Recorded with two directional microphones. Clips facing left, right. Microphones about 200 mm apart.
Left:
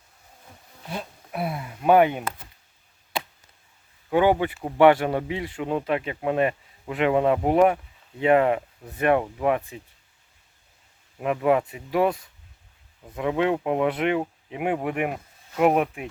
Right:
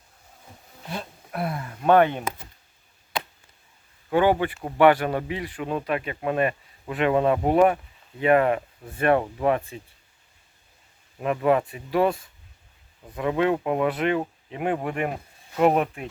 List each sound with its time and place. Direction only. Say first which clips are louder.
0.9 s a sound: even; 5° left (ahead or behind)
4.1 s speech: even; 15° left (ahead or behind)
11.2 s speech: even; 15° left (ahead or behind)
13.1 s speech: even; 15° left (ahead or behind)